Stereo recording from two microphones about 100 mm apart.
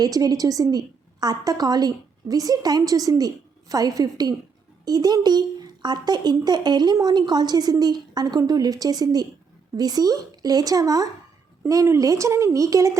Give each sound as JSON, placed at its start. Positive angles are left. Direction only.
{"t": 0.0, "sound": "a woman's voice", "side_deg": -35}